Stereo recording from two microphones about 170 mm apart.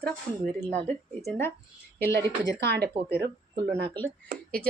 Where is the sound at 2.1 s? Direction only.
75° right (ahead or behind).